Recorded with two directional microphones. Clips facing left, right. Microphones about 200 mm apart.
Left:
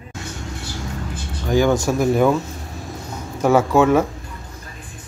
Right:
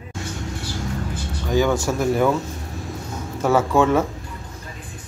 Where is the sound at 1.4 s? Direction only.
15° left (ahead or behind).